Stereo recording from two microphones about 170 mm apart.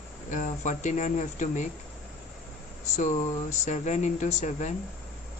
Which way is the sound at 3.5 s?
45° left (ahead or behind).